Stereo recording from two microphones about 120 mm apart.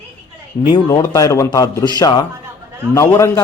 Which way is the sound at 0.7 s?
30° left (ahead or behind).